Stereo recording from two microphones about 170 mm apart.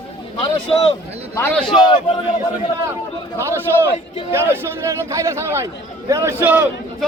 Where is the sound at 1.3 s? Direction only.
10° left (ahead or behind).